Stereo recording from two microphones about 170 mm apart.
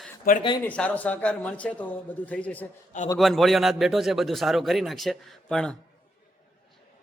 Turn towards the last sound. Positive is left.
turn(degrees=5)  # may be behind; listen again after turning